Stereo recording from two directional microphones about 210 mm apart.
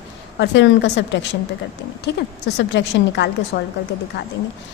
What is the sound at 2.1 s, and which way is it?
A woman's voice, 55° left (ahead or behind).